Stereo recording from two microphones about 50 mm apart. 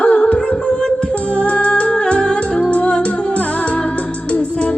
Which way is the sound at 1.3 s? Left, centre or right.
Left.